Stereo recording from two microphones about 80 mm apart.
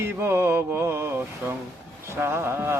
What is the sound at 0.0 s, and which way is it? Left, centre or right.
Mantra, right.